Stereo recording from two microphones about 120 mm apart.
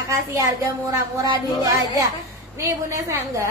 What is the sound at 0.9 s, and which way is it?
Speech, 25° right (ahead or behind).